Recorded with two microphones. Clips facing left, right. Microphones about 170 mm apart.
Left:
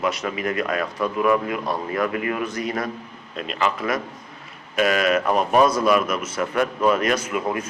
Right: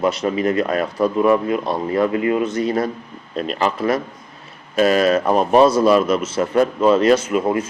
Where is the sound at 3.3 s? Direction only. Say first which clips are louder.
Right 4 dB; 40° right (ahead or behind).